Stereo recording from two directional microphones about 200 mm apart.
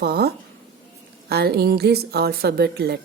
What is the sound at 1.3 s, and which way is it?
A woman's voice, 50° right (ahead or behind).